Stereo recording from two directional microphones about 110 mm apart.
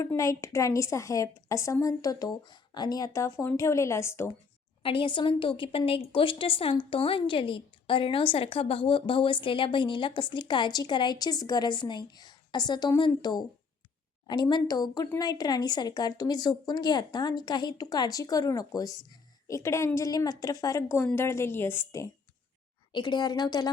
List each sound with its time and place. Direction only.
0.2 s a woman's voice: 30° left (ahead or behind)
4.8 s a woman's voice: 50° left (ahead or behind); by 22.1 s 25° left (ahead or behind)
22.9 s a woman's voice: 45° left (ahead or behind)